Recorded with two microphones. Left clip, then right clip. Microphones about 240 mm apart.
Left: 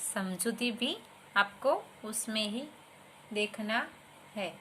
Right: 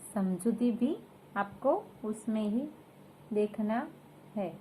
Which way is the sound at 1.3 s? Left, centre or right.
Left.